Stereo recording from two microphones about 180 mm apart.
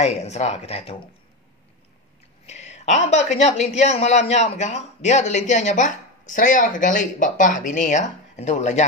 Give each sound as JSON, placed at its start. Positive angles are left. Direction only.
{"t": 0.0, "sound": "a woman's voice", "side_deg": 35}
{"t": 2.4, "sound": "a woman's voice", "side_deg": 40}